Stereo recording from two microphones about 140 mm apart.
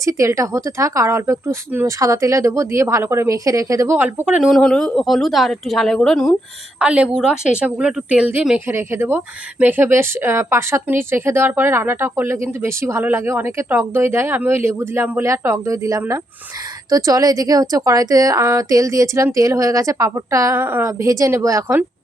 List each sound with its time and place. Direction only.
0.0 s a woman's voice: 20° right (ahead or behind)
4.4 s speech: centre (ahead or behind)
6.7 s a woman's voice: 10° right (ahead or behind)